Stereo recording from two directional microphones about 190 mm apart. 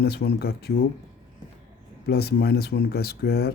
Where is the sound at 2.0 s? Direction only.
55° left (ahead or behind).